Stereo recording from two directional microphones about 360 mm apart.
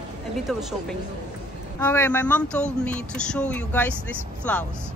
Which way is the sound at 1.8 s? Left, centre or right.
Centre.